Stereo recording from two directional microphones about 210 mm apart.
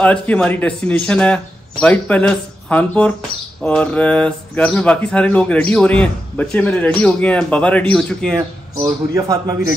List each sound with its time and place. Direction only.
0.0 s a man's voice: 5° left (ahead or behind)
9.1 s a man's voice: 15° right (ahead or behind)